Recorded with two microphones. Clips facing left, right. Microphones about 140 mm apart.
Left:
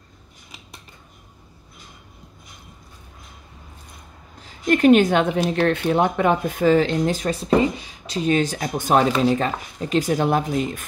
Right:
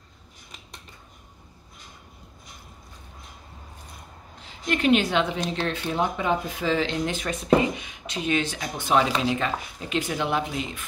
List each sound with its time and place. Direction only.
4.4 s a woman's voice: 45° left (ahead or behind)